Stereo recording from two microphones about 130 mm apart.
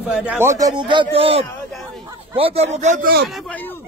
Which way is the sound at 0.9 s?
40° right (ahead or behind).